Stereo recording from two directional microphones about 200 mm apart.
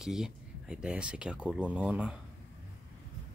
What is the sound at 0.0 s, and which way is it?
Speech, 5° right (ahead or behind).